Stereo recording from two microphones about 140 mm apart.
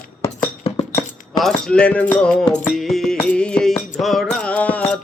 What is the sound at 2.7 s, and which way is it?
Music, centre (ahead or behind).